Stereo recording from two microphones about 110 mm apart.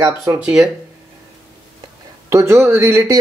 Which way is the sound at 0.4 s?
5° right (ahead or behind).